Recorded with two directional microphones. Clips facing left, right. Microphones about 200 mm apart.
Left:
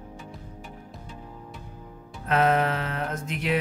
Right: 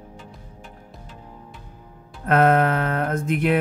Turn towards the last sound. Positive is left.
turn(degrees=-55)  # may be behind; listen again after turning